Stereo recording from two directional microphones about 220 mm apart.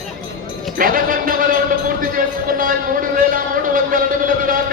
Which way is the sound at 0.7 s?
40° right (ahead or behind).